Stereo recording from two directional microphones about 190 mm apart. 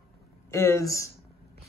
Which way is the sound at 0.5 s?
15° left (ahead or behind).